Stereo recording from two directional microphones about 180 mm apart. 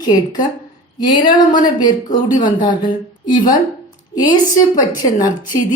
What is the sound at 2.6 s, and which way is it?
A woman's voice, 25° left (ahead or behind).